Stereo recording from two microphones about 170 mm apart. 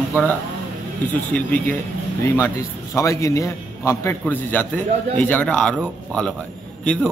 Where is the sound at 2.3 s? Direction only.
15° left (ahead or behind).